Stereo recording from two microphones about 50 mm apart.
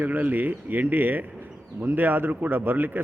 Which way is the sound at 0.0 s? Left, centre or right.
Right.